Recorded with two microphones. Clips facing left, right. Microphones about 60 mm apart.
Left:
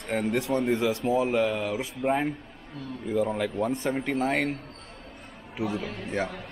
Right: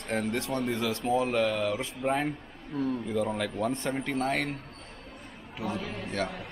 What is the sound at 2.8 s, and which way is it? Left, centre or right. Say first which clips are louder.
Speech: right 9 dB; right.